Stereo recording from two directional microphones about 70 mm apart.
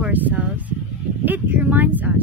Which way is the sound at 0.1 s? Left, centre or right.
Right.